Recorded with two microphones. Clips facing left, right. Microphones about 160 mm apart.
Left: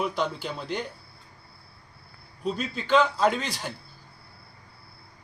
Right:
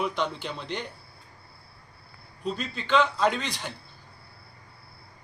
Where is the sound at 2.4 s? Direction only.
5° left (ahead or behind).